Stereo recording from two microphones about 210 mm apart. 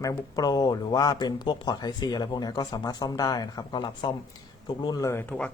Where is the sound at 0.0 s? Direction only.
15° left (ahead or behind).